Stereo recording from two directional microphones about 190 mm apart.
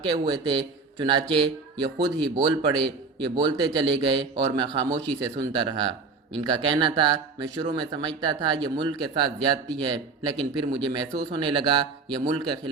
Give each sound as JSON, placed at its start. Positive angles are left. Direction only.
{"t": 0.0, "sound": "speech", "side_deg": -20}